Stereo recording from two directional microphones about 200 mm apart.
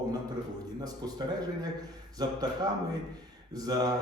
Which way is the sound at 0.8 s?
20° right (ahead or behind).